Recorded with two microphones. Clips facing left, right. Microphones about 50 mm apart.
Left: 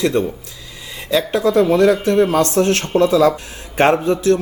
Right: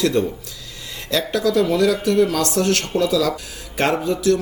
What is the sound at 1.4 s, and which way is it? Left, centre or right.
Speech, left.